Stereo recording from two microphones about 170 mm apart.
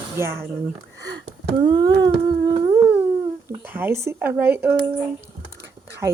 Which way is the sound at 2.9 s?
10° right (ahead or behind).